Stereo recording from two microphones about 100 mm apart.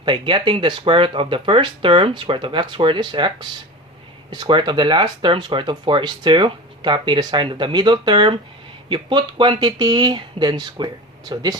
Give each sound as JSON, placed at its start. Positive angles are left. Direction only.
{"t": 0.0, "sound": "speech", "side_deg": -55}